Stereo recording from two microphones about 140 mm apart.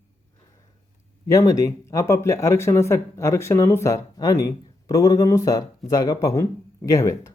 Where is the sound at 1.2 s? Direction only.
25° left (ahead or behind).